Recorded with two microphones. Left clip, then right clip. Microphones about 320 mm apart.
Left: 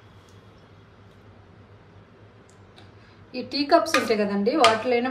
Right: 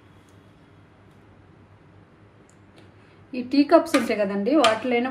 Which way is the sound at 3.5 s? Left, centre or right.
Centre.